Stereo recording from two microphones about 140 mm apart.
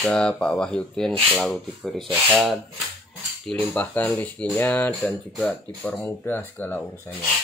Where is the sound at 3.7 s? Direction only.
10° left (ahead or behind).